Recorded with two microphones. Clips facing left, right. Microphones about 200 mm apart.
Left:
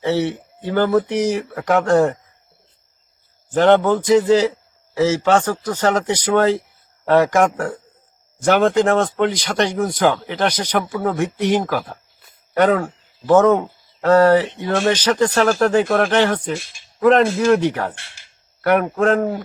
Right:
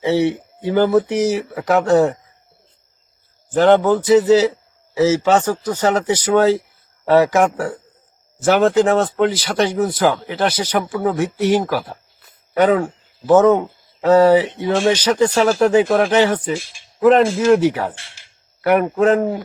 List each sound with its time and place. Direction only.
0.0 s speech: 10° right (ahead or behind)
3.5 s speech: 5° right (ahead or behind)